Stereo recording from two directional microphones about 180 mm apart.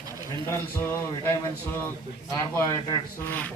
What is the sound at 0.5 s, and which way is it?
A man's voice, 15° left (ahead or behind).